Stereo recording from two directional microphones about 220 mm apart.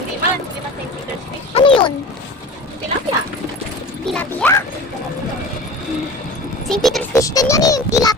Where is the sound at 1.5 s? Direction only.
25° left (ahead or behind).